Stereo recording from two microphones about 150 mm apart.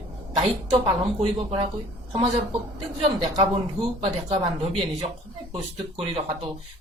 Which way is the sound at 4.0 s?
40° right (ahead or behind).